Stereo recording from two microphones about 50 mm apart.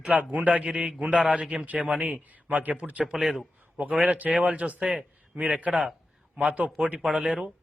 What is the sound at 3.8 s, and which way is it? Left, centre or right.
Speech, right.